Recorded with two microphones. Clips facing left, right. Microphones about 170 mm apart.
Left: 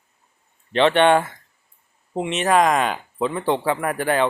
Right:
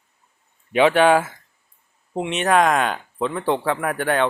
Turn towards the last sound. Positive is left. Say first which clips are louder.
# even
turn(degrees=0)  # may be behind; listen again after turning